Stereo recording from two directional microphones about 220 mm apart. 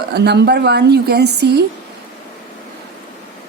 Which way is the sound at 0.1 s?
50° right (ahead or behind).